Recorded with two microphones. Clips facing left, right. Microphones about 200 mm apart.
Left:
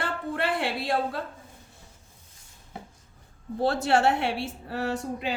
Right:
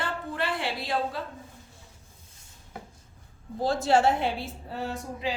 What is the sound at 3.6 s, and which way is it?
A woman's voice, 65° left (ahead or behind).